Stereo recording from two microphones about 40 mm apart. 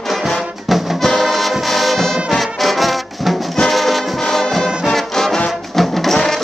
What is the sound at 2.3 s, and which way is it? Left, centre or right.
Brass instrument, centre.